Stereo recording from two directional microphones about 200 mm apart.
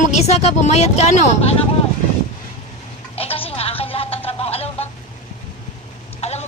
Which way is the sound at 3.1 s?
30° left (ahead or behind).